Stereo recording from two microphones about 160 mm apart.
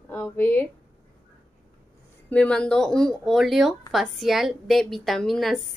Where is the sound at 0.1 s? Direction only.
10° left (ahead or behind).